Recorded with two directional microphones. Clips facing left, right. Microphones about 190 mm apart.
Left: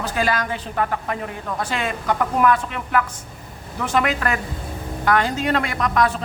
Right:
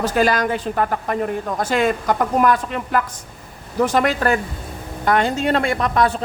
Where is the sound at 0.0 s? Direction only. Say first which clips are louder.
Right 5 dB; 45° right (ahead or behind).